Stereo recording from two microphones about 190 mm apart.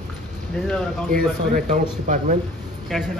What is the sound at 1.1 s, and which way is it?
Speech, 45° right (ahead or behind).